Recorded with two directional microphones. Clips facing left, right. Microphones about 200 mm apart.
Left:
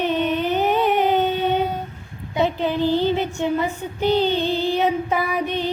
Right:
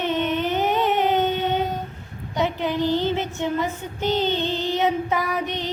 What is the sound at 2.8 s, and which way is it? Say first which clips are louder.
Child singing: left 4 dB; 15° left (ahead or behind).